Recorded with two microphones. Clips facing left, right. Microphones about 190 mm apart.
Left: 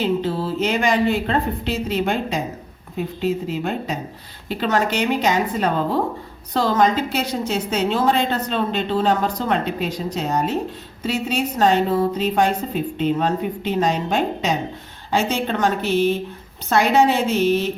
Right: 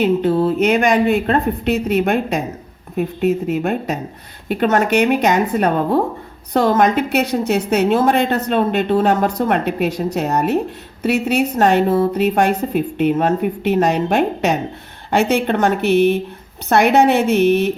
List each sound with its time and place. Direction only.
0.0 s a woman's voice: 55° right (ahead or behind)